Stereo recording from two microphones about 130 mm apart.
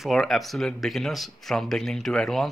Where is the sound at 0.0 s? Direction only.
Centre (ahead or behind).